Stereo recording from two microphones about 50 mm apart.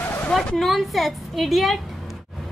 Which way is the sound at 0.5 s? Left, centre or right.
Centre.